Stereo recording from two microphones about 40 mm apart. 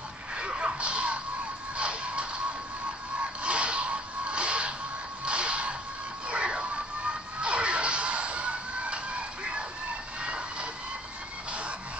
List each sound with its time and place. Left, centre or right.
0.4 s music: right
3.2 s whip: right
5.2 s music: right
10.2 s vehicle: right